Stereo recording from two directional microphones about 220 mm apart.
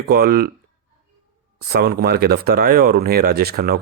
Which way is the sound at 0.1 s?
45° right (ahead or behind).